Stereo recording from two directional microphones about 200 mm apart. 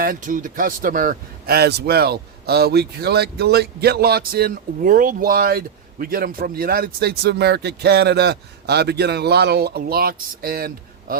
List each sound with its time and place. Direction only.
0.0 s a man's voice: 40° right (ahead or behind)